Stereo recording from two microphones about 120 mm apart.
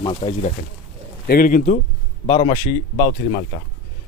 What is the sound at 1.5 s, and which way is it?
Speech, 90° left.